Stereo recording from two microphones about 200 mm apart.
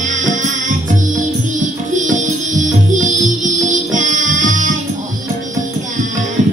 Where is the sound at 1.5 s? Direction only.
40° right (ahead or behind).